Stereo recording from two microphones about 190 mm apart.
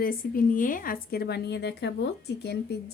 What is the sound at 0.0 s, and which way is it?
A woman's voice, 50° left (ahead or behind).